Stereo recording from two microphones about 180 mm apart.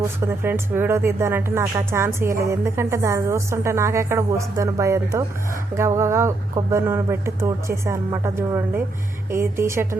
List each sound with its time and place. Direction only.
0.2 s speech: 15° right (ahead or behind)